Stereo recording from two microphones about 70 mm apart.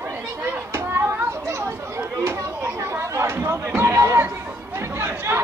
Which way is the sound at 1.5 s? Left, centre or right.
Right.